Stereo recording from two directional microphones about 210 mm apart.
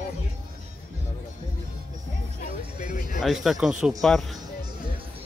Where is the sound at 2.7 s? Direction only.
40° left (ahead or behind).